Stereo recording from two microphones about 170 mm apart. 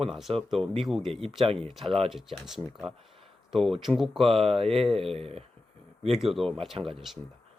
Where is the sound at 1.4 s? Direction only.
35° right (ahead or behind).